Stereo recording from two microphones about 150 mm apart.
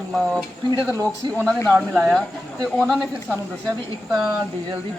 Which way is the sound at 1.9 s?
Centre (ahead or behind).